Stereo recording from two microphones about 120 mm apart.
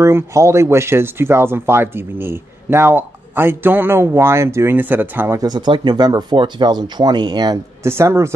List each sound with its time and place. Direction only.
0.0 s speech: 25° right (ahead or behind)
5.4 s speech: 35° right (ahead or behind)